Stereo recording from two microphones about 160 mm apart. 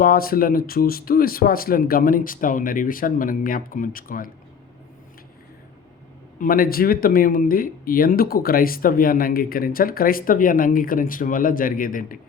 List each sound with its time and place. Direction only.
0.0 s speech: 65° left (ahead or behind)
6.4 s speech: 65° left (ahead or behind)